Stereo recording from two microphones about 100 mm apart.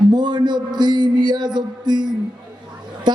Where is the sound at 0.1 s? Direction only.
45° right (ahead or behind).